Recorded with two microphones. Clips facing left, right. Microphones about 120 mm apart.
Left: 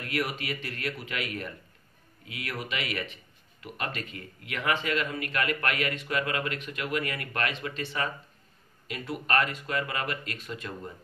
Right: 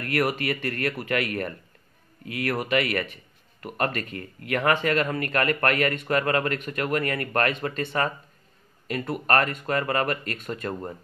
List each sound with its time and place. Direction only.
0.0 s speech: 55° right (ahead or behind)